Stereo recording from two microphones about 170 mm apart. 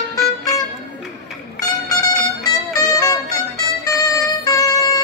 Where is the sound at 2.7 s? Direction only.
20° left (ahead or behind).